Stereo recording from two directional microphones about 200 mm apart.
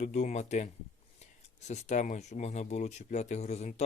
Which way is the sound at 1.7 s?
35° left (ahead or behind).